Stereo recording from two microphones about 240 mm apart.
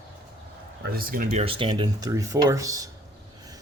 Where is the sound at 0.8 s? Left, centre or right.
Right.